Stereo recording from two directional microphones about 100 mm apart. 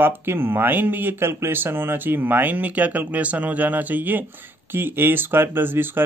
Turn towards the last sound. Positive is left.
turn(degrees=-20)  # may be behind; listen again after turning